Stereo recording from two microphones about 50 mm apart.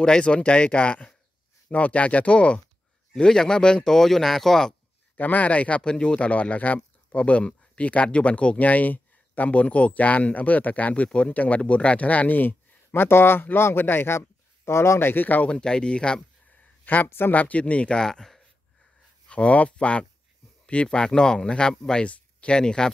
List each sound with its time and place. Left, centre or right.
0.0 s speech: centre
5.1 s speech: left
15.4 s speech: centre
16.8 s speech: left; by 18.4 s centre
19.2 s speech: left
22.1 s a sound: left
22.6 s speech: centre